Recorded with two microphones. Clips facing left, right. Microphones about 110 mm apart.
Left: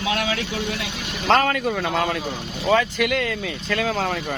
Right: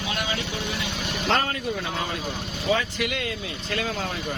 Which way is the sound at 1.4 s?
90° left.